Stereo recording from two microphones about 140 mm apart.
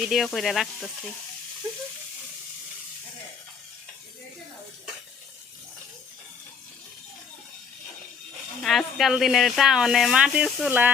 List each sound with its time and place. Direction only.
0.1 s speech: centre (ahead or behind)
8.6 s speech: centre (ahead or behind)